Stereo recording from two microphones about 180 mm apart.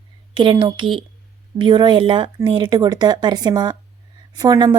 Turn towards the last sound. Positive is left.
turn(degrees=-20)  # may be behind; listen again after turning